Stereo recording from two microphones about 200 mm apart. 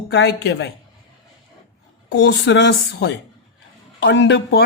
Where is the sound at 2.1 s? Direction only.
60° left (ahead or behind).